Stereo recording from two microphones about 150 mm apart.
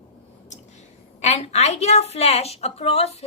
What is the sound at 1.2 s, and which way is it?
A woman's voice, 50° left (ahead or behind).